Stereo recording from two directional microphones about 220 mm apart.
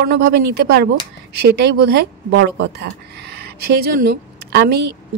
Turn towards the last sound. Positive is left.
turn(degrees=-50)  # may be behind; listen again after turning